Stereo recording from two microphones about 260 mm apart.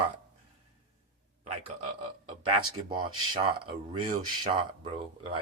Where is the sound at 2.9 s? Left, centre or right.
Centre.